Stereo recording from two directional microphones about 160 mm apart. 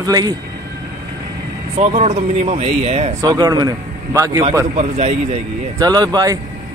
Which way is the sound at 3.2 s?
25° right (ahead or behind).